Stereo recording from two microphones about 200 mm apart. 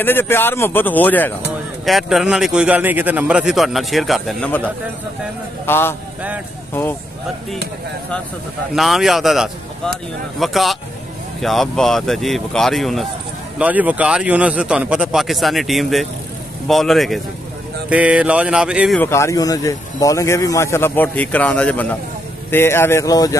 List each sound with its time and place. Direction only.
0.0 s a man's voice: 10° left (ahead or behind)
5.7 s speech: 10° left (ahead or behind)
8.7 s a man's voice: centre (ahead or behind)
18.9 s speech: 15° left (ahead or behind)